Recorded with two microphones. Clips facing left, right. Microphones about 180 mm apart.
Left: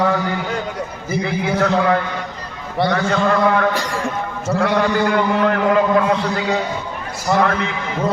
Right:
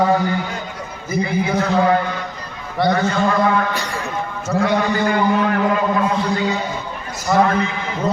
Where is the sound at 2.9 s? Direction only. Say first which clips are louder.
Even; 65° left (ahead or behind).